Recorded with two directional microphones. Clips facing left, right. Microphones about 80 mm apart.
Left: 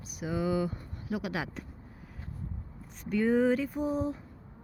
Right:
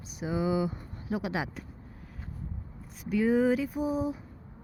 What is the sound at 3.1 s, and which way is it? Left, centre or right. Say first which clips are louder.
Speech: right 1 dB; centre.